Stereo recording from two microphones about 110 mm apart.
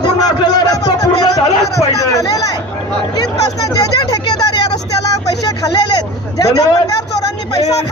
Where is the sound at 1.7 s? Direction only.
30° left (ahead or behind).